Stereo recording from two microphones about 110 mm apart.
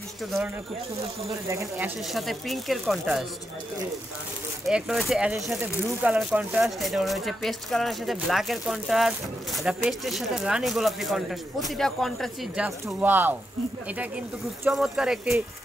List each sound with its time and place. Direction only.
1.3 s speech: 25° right (ahead or behind)
2.0 s speech: centre (ahead or behind)
4.6 s speech: 5° right (ahead or behind)
6.8 s speech: centre (ahead or behind)
12.8 s speech: 20° right (ahead or behind)